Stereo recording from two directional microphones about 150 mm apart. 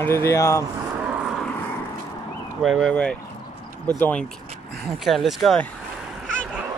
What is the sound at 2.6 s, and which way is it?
Speech, centre (ahead or behind).